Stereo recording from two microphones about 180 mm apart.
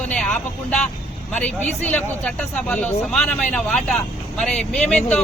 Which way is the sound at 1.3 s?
5° left (ahead or behind).